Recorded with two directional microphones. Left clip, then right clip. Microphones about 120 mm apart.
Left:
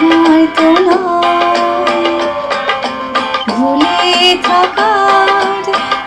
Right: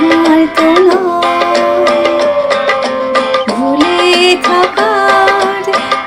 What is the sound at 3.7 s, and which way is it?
Music, 30° right (ahead or behind).